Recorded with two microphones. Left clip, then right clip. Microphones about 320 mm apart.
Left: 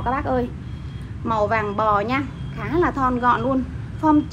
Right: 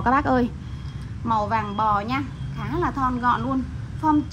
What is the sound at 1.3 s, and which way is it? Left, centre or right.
A woman's voice, centre.